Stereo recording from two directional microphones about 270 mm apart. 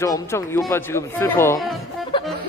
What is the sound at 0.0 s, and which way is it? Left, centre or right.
Speech, centre.